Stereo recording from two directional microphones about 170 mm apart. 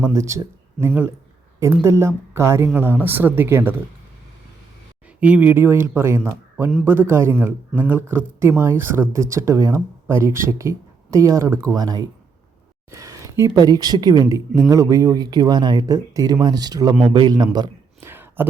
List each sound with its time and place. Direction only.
0.1 s speech: 15° right (ahead or behind)
5.2 s a man's voice: 10° right (ahead or behind)
18.1 s a sound: 10° right (ahead or behind)